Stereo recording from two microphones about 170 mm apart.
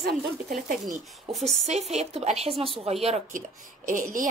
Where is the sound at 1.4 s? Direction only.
40° right (ahead or behind).